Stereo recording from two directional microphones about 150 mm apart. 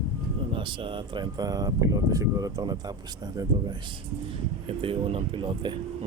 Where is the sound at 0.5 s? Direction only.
35° right (ahead or behind).